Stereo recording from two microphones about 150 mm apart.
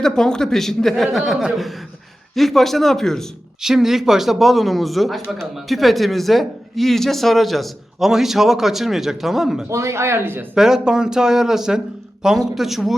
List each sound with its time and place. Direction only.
0.0 s speech: 5° left (ahead or behind)
9.6 s speech: 20° right (ahead or behind)
10.5 s speech: 5° right (ahead or behind)